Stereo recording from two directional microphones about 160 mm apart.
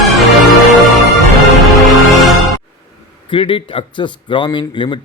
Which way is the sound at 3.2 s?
30° left (ahead or behind).